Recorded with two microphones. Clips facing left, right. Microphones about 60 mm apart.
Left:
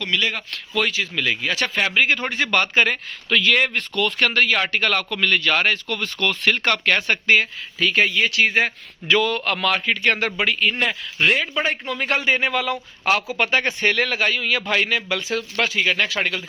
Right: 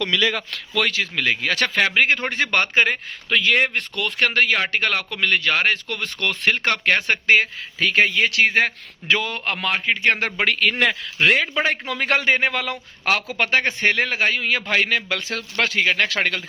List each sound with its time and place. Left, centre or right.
0.8 s speech: right
1.1 s a man's voice: right
1.4 s speech: right
1.8 s a man's voice: right
2.8 s a man's voice: right
10.6 s a man's voice: right
12.3 s a man's voice: right
13.1 s a man's voice: right
15.3 s speech: right
16.0 s speech: right